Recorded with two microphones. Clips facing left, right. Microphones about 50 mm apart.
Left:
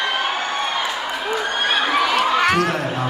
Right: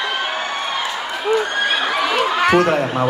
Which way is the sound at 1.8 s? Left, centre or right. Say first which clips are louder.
Even; centre.